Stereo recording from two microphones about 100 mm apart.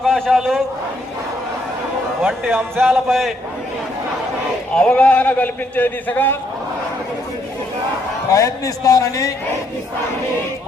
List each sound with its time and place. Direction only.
0.0 s a sound: centre (ahead or behind)
2.2 s speech: 20° right (ahead or behind)
3.1 s a man's voice: centre (ahead or behind)
4.7 s speech: 10° left (ahead or behind)
8.3 s a man's voice: 35° left (ahead or behind)